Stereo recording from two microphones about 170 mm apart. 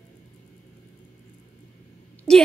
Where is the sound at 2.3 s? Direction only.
5° left (ahead or behind).